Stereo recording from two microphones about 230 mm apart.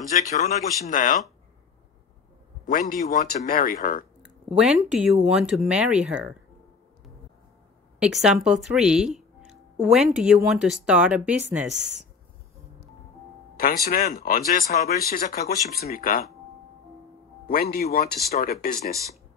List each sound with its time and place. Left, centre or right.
0.1 s speech: left
2.7 s speech: left
4.2 s speech: centre
8.0 s speech: centre
13.6 s speech: left
17.5 s speech: left